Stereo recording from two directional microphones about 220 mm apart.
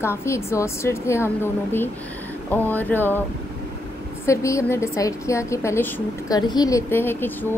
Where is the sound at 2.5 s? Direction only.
10° left (ahead or behind).